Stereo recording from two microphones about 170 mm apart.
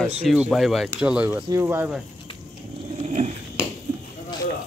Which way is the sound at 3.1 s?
45° right (ahead or behind).